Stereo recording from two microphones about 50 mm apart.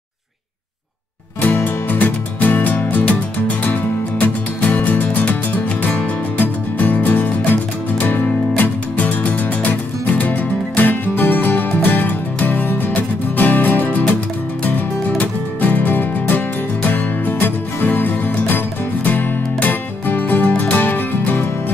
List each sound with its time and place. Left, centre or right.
1.4 s music: left
15.1 s music: left